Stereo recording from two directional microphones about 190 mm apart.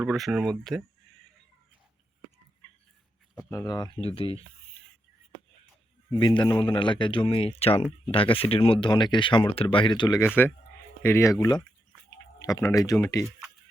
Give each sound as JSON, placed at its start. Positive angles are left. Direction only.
{"t": 0.0, "sound": "speech", "side_deg": 0}
{"t": 3.3, "sound": "speech", "side_deg": 15}
{"t": 6.1, "sound": "speech", "side_deg": 25}